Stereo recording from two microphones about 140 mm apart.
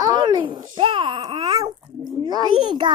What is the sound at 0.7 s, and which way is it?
Babbling, 35° right (ahead or behind).